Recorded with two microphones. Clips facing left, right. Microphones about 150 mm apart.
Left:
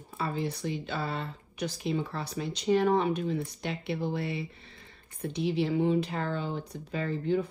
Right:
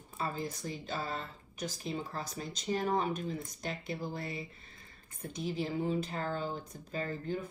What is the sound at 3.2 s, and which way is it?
Speech, 35° left (ahead or behind).